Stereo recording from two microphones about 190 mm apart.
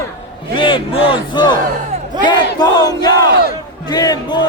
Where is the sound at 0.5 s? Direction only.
25° left (ahead or behind).